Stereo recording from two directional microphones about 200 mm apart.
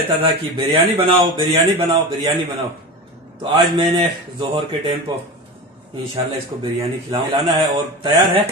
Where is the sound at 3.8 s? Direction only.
25° right (ahead or behind).